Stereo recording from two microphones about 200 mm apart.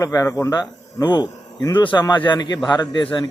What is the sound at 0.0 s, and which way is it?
Speech, 15° left (ahead or behind).